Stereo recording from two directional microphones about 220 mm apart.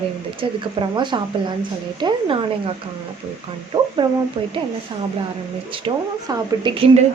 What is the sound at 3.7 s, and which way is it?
Speech, 20° right (ahead or behind).